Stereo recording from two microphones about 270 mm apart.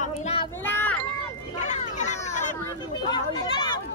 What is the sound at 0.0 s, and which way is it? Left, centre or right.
Children playing, left.